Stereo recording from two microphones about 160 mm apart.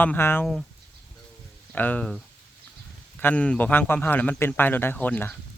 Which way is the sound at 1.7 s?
10° left (ahead or behind).